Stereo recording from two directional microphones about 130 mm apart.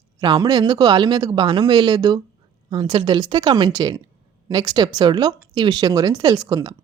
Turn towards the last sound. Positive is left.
turn(degrees=-30)  # may be behind; listen again after turning